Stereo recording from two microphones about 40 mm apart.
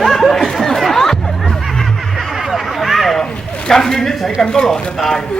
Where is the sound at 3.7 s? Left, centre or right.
Centre.